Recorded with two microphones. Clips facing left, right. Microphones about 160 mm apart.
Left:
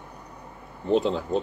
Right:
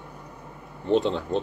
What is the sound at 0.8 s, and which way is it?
Speech, centre (ahead or behind).